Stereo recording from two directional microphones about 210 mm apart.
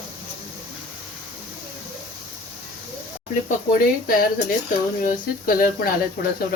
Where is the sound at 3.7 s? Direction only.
45° left (ahead or behind).